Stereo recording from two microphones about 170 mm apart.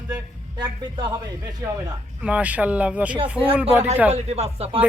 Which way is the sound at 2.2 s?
10° right (ahead or behind).